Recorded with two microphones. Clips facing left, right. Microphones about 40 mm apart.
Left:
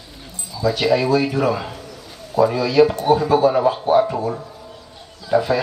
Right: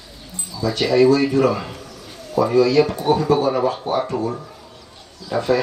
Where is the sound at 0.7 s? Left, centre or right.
Left.